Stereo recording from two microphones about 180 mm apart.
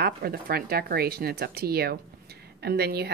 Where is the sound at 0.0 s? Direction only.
55° right (ahead or behind).